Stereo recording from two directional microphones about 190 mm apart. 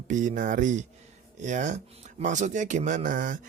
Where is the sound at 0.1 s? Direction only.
40° right (ahead or behind).